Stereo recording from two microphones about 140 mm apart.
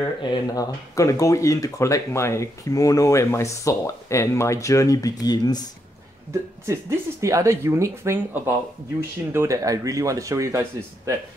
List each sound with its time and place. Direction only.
0.2 s speech: 30° left (ahead or behind)
6.6 s speech: 20° right (ahead or behind)